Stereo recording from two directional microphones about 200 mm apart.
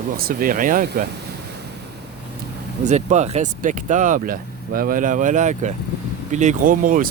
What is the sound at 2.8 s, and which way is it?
Speech, 35° right (ahead or behind).